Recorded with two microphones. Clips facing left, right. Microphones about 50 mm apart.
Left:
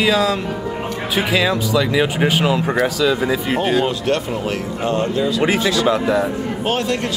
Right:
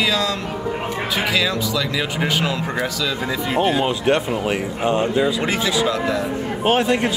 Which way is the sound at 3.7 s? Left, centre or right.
Centre.